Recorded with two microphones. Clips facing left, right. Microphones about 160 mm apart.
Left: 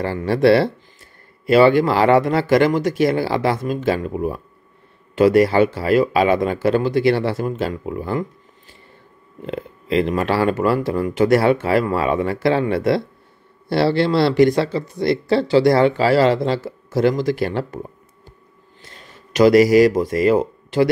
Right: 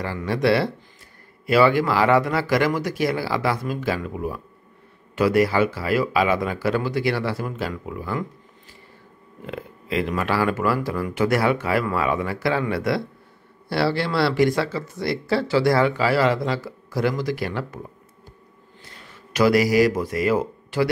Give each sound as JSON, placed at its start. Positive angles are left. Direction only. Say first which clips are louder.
{"t": 0.0, "sound": "speech", "louder": "left 6 dB", "side_deg": 30}
{"t": 9.5, "sound": "speech", "louder": "left 6 dB", "side_deg": 30}
{"t": 19.3, "sound": "speech", "louder": "left 6 dB", "side_deg": 20}